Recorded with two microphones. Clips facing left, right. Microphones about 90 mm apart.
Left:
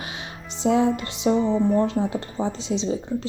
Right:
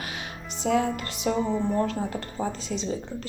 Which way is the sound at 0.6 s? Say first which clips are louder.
Left 4 dB; 25° left (ahead or behind).